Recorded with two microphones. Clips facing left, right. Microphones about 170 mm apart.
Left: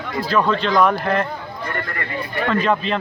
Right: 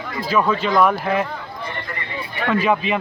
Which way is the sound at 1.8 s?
55° left (ahead or behind).